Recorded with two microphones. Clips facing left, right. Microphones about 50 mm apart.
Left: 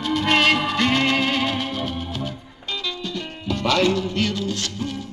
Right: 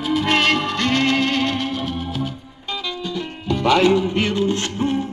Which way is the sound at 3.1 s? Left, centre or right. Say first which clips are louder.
Right 4 dB; centre.